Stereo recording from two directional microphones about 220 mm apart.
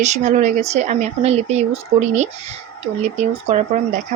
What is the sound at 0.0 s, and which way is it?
Speech, 30° right (ahead or behind).